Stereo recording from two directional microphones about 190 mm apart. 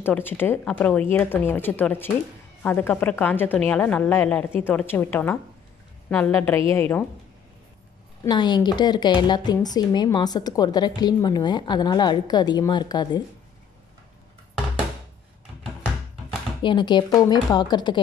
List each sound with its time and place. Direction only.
0.0 s a woman's voice: 10° left (ahead or behind)
8.2 s speech: 25° left (ahead or behind)
16.6 s speech: 25° left (ahead or behind)